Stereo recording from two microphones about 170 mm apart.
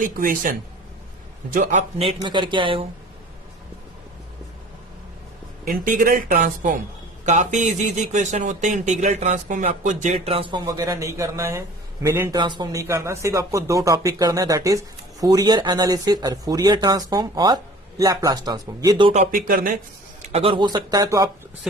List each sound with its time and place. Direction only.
0.0 s speech: 50° right (ahead or behind)
1.5 s speech: 45° right (ahead or behind); by 2.8 s 30° right (ahead or behind)
5.6 s a man's voice: 55° right (ahead or behind); by 12.4 s 15° right (ahead or behind)
12.4 s speech: 25° right (ahead or behind)
19.5 s speech: 55° right (ahead or behind)
20.3 s speech: 35° right (ahead or behind)